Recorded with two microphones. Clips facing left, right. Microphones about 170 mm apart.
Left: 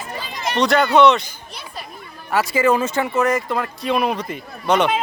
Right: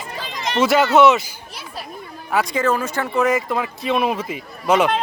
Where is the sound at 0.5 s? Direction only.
5° right (ahead or behind).